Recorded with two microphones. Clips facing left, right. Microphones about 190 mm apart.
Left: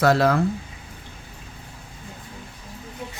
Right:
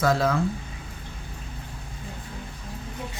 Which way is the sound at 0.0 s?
70° left (ahead or behind).